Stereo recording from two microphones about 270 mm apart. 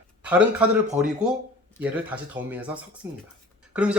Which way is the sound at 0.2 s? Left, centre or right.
Centre.